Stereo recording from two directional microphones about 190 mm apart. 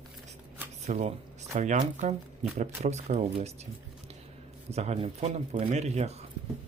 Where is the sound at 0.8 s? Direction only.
35° right (ahead or behind).